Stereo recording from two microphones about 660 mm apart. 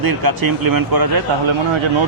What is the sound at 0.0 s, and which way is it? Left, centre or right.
A man's voice, right.